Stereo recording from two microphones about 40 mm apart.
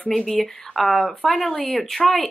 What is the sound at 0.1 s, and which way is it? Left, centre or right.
Speech, centre.